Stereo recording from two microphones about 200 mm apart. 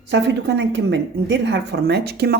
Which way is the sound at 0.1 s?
60° right (ahead or behind).